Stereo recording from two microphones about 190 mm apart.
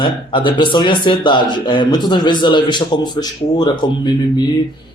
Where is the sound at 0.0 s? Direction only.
25° left (ahead or behind).